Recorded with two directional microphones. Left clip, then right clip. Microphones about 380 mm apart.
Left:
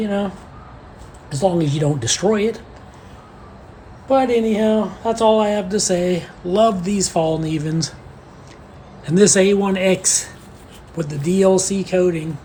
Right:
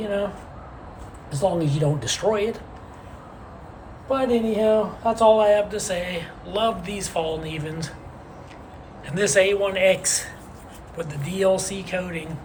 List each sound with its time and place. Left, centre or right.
1.3 s speech: centre
4.1 s speech: centre
9.0 s speech: centre